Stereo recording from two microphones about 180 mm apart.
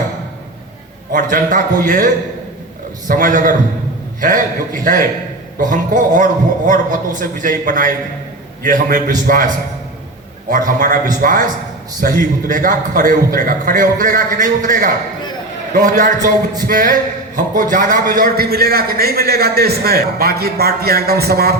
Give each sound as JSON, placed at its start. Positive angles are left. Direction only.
{"t": 1.1, "sound": "a man's voice", "side_deg": -45}
{"t": 3.1, "sound": "a man's voice", "side_deg": -45}
{"t": 10.7, "sound": "a man's voice", "side_deg": -50}